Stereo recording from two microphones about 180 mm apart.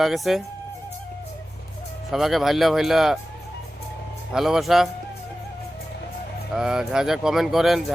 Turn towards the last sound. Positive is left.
turn(degrees=0)  # may be behind; listen again after turning